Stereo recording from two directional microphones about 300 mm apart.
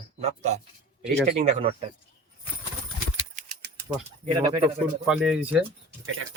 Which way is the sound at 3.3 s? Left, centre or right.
Right.